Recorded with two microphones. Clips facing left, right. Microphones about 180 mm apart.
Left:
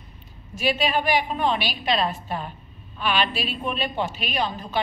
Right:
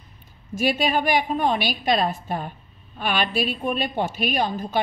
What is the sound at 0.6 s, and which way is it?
A woman's voice, 45° right (ahead or behind).